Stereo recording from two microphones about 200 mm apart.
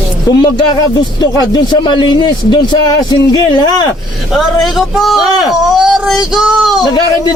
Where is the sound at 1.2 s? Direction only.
20° left (ahead or behind).